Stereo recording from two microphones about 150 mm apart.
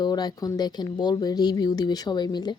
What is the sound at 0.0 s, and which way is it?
Speech, 25° left (ahead or behind).